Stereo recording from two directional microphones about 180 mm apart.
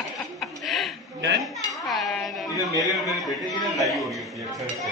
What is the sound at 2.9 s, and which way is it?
A woman's voice, centre (ahead or behind).